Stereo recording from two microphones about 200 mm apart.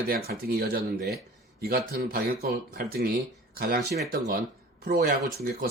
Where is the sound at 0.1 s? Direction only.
50° right (ahead or behind).